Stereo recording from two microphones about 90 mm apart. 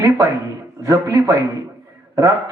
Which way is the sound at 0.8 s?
35° right (ahead or behind).